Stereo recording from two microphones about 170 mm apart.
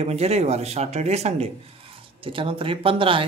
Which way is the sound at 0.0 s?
40° right (ahead or behind).